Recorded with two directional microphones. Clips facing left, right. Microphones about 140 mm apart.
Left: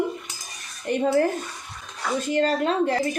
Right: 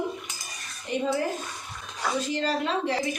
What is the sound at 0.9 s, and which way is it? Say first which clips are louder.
Speech: left 4 dB; 55° left (ahead or behind).